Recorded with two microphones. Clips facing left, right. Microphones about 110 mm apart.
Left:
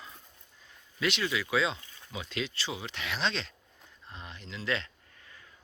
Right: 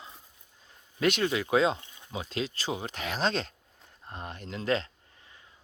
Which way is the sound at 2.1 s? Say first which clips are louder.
Right 3 dB; 35° right (ahead or behind).